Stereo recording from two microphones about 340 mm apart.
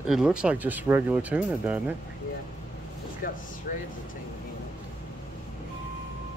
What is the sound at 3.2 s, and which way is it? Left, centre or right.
Speech, left.